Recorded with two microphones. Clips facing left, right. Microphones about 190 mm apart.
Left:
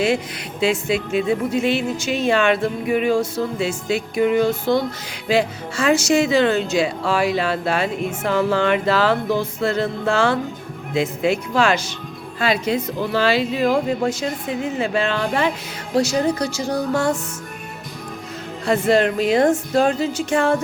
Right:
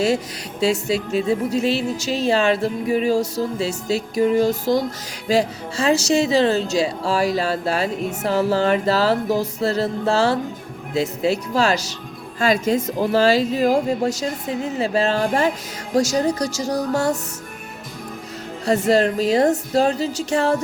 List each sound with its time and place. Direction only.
0.6 s speech: 40° right (ahead or behind)
18.6 s speech: 40° right (ahead or behind)